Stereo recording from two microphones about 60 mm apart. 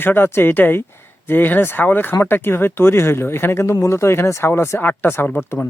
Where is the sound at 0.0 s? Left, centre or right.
Left.